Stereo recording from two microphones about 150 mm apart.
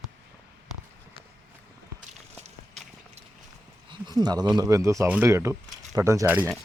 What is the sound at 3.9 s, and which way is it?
Speech, 30° right (ahead or behind).